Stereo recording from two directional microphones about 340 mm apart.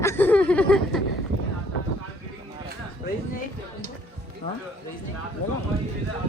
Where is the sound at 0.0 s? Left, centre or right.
Centre.